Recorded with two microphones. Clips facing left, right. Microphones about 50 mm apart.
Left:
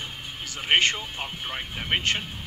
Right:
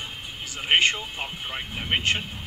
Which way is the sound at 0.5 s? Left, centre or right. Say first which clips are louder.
Right 1 dB; centre.